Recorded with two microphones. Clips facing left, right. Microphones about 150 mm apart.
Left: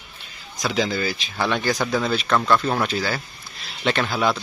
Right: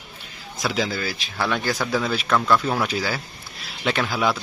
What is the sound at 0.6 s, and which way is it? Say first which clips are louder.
Speech: left 2 dB; centre (ahead or behind).